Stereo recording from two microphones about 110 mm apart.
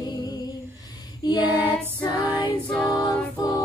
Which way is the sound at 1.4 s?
15° right (ahead or behind).